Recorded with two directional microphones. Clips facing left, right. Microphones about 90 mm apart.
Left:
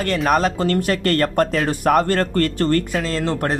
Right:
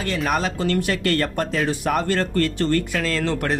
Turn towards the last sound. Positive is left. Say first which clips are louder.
# left 1 dB
turn(degrees=35)  # may be behind; listen again after turning